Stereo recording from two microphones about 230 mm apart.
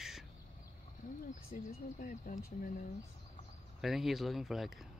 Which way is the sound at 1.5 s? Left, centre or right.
Left.